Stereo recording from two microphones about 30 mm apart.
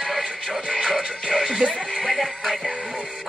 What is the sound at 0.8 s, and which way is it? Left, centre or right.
Music, centre.